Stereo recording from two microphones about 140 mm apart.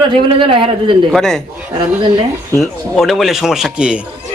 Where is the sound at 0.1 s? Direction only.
40° right (ahead or behind).